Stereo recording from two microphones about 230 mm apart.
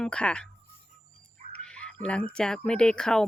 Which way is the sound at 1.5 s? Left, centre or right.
Centre.